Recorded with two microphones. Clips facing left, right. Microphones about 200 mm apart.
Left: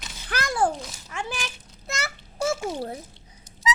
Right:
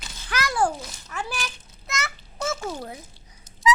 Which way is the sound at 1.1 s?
20° left (ahead or behind).